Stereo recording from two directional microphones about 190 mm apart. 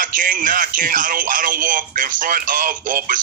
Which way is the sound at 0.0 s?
45° right (ahead or behind).